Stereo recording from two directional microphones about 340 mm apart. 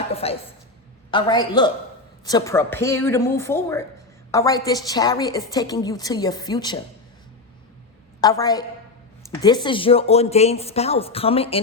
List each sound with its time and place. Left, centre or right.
0.1 s a sound: centre
1.1 s a woman's voice: centre
8.2 s a woman's voice: centre